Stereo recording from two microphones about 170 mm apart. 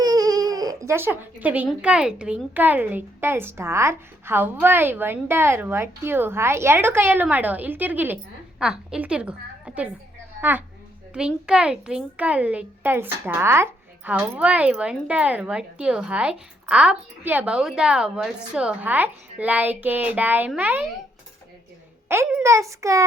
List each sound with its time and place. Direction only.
0.0 s speech: 20° right (ahead or behind)
11.1 s speech: 5° right (ahead or behind)
22.1 s speech: 15° right (ahead or behind)